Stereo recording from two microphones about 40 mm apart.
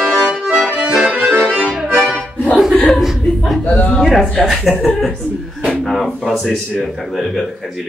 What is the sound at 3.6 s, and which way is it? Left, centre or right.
Speech, left.